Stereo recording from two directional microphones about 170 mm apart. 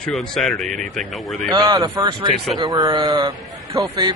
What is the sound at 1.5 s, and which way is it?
Speech, 25° right (ahead or behind).